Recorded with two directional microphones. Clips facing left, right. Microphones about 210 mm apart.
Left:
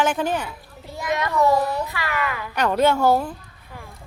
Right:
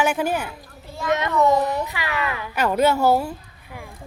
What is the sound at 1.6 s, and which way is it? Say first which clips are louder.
Speech: right 1 dB; 20° right (ahead or behind).